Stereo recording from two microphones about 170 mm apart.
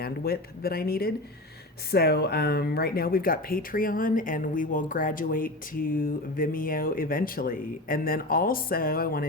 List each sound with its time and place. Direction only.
0.0 s speech: 65° left (ahead or behind)